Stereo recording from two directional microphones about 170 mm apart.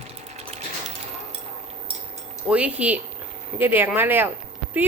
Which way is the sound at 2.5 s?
10° right (ahead or behind).